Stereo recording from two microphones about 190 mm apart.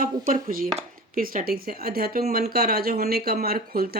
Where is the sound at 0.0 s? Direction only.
45° right (ahead or behind).